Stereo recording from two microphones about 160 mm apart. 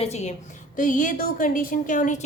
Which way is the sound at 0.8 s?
55° left (ahead or behind).